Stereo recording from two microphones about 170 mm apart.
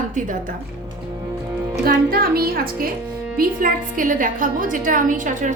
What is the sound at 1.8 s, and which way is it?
A woman's voice, 60° right (ahead or behind).